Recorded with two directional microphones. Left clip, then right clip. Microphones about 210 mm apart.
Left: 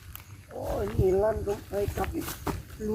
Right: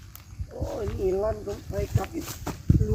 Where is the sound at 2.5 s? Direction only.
10° right (ahead or behind).